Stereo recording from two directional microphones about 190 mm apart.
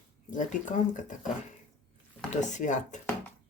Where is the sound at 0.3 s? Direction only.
40° left (ahead or behind).